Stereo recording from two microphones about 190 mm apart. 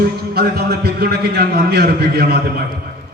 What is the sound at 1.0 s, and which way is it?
A man's voice, 55° right (ahead or behind).